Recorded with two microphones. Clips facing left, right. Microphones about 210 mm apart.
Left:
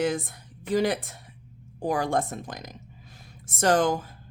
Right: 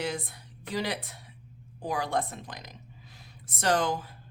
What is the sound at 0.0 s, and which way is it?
A woman's voice, 50° left (ahead or behind).